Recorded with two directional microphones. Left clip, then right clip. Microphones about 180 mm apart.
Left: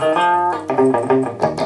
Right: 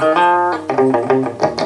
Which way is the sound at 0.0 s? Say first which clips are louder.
Right 3 dB; 25° right (ahead or behind).